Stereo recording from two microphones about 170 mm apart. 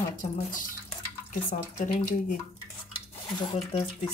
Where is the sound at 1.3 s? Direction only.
50° left (ahead or behind).